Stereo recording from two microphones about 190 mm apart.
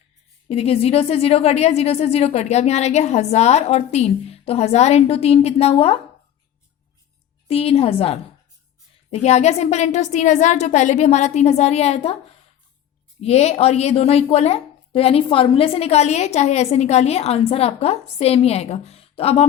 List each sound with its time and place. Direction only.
0.4 s a woman's voice: 30° left (ahead or behind)
7.4 s a woman's voice: 30° left (ahead or behind)
13.2 s a woman's voice: 35° left (ahead or behind)